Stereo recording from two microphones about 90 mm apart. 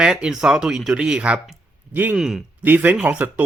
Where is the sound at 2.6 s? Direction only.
20° right (ahead or behind).